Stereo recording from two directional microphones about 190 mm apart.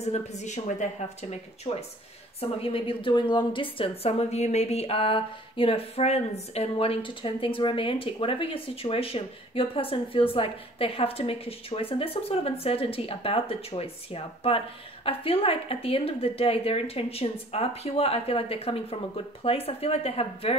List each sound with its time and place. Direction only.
0.0 s a woman's voice: 35° left (ahead or behind)